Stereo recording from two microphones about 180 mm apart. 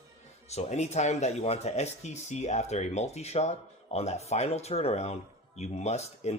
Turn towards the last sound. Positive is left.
turn(degrees=40)  # may be behind; listen again after turning